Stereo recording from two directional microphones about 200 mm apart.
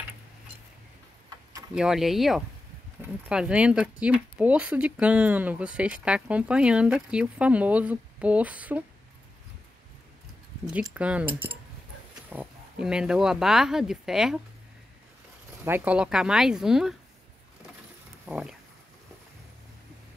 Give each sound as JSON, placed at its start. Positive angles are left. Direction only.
{"t": 1.8, "sound": "speech", "side_deg": 0}
{"t": 10.7, "sound": "speech", "side_deg": -5}
{"t": 12.3, "sound": "speech", "side_deg": -5}
{"t": 15.6, "sound": "speech", "side_deg": -10}
{"t": 18.2, "sound": "speech", "side_deg": -5}